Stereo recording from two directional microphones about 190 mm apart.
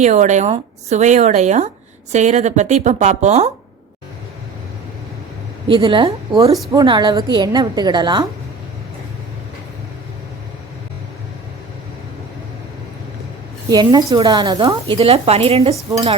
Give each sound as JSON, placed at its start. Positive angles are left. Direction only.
{"t": 0.0, "sound": "speech", "side_deg": -40}
{"t": 5.6, "sound": "a woman's voice", "side_deg": -25}
{"t": 13.7, "sound": "a woman's voice", "side_deg": -20}
{"t": 15.7, "sound": "cutlery", "side_deg": -15}